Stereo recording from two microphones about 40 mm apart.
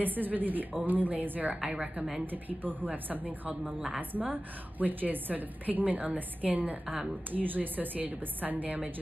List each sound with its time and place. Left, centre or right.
0.0 s a woman's voice: right